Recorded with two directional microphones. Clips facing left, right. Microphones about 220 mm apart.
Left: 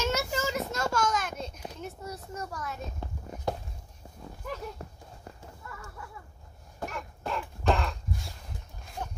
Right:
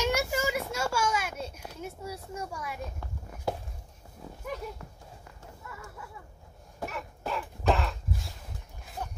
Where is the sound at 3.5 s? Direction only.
5° right (ahead or behind).